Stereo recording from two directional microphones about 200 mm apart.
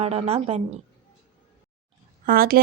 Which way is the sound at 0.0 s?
30° right (ahead or behind).